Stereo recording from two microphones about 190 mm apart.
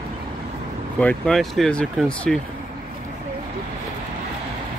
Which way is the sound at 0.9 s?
5° left (ahead or behind).